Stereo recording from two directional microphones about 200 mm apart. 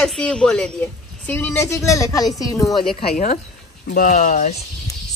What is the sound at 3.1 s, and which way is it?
A woman's voice, 40° left (ahead or behind).